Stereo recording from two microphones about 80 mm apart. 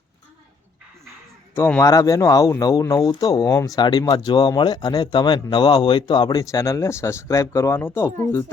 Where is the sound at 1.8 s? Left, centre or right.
Left.